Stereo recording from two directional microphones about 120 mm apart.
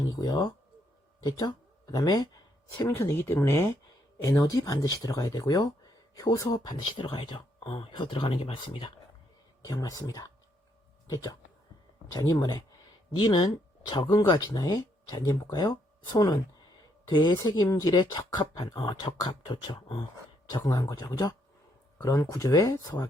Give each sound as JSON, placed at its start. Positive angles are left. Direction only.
{"t": 0.2, "sound": "speech", "side_deg": 35}
{"t": 2.9, "sound": "speech", "side_deg": 20}
{"t": 9.6, "sound": "speech", "side_deg": 30}
{"t": 20.6, "sound": "speech", "side_deg": 25}